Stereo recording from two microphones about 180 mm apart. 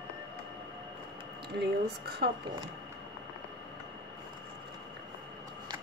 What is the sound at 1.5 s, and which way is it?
Speech, 70° right (ahead or behind).